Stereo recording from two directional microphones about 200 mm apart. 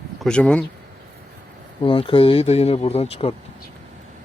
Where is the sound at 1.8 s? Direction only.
25° left (ahead or behind).